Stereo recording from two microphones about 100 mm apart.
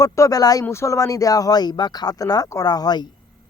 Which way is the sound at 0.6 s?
25° left (ahead or behind).